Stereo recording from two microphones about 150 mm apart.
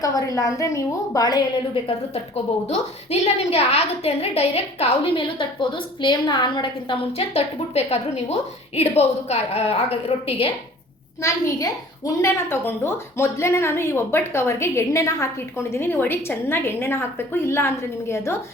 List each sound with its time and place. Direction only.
0.0 s a woman's voice: 25° left (ahead or behind); by 10.5 s 40° left (ahead or behind)
11.2 s a woman's voice: 20° left (ahead or behind)